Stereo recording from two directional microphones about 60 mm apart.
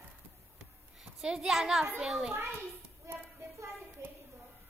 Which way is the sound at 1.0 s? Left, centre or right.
Centre.